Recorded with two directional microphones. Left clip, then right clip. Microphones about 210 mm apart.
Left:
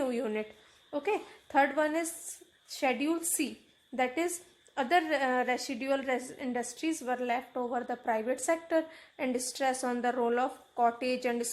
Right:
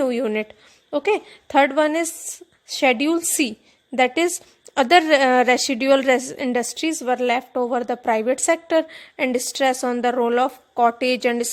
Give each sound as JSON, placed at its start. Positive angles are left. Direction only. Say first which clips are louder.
{"t": 0.0, "sound": "a woman's voice", "louder": "right 11 dB", "side_deg": -35}